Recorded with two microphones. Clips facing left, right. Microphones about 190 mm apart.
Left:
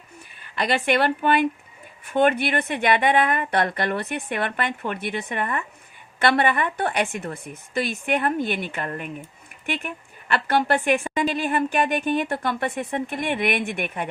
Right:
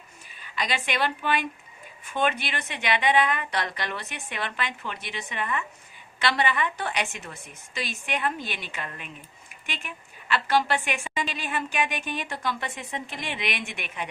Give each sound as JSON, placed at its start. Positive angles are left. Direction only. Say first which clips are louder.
{"t": 0.4, "sound": "a woman's voice", "louder": "left 7 dB", "side_deg": 55}